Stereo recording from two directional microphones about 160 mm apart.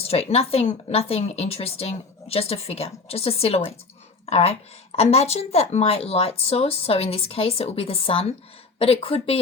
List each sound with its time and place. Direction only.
0.0 s a woman's voice: 40° left (ahead or behind)